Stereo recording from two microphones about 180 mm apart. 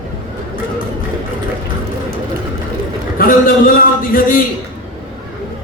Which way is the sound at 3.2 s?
55° left (ahead or behind).